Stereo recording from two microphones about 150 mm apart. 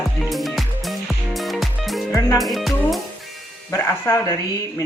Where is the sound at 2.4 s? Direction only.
Centre (ahead or behind).